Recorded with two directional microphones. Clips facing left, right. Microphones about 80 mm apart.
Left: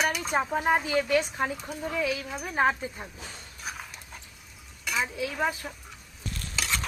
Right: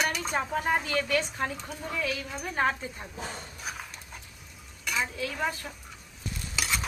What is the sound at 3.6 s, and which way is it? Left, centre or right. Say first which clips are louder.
Horse: even; centre.